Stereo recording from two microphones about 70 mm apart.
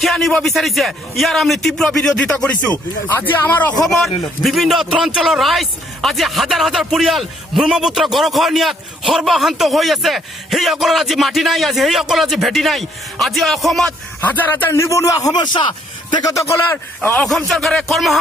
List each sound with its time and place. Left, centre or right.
0.0 s a man's voice: centre
2.7 s speech: left
3.8 s a man's voice: centre
14.2 s speech: left
14.7 s a man's voice: left
16.6 s speech: left
17.5 s a man's voice: centre